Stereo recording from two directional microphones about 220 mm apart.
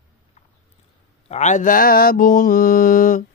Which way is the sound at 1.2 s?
30° left (ahead or behind).